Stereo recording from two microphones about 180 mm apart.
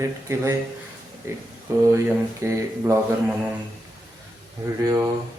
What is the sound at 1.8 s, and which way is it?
Speech, 15° right (ahead or behind).